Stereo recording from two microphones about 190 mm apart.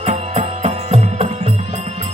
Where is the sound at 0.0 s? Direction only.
30° right (ahead or behind).